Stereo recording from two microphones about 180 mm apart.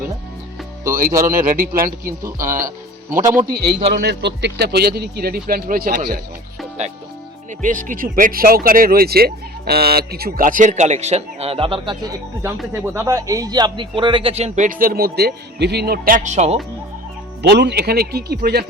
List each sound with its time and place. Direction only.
1.3 s speech: 50° right (ahead or behind)
3.8 s speech: 40° right (ahead or behind)
4.0 s speech: 65° right (ahead or behind)
7.6 s speech: 50° right (ahead or behind); by 12.1 s 30° right (ahead or behind)
12.7 s speech: 15° right (ahead or behind); by 16.6 s 40° right (ahead or behind)
17.4 s speech: 65° right (ahead or behind)